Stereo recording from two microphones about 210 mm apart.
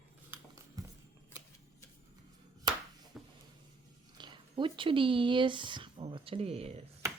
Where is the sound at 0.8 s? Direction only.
15° right (ahead or behind).